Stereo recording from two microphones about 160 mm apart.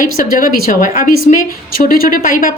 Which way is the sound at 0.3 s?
60° left (ahead or behind).